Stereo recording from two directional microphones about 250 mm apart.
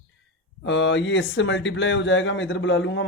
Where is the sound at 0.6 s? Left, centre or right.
Left.